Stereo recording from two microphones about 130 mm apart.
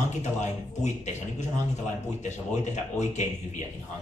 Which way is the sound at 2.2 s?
65° left (ahead or behind).